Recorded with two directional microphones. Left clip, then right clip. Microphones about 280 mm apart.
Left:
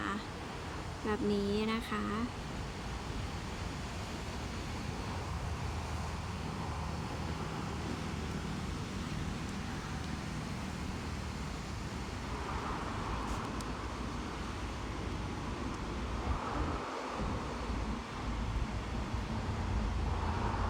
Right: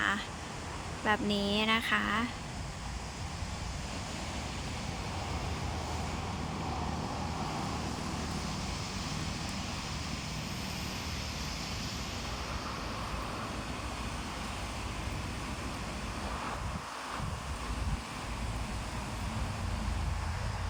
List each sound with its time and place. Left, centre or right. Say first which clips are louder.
1.0 s speech: right 4 dB; centre